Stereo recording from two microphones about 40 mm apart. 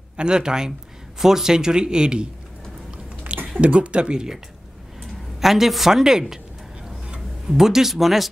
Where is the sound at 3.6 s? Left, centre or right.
Right.